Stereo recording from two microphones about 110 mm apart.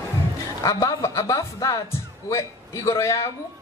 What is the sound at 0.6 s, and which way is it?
A woman's voice, 30° left (ahead or behind).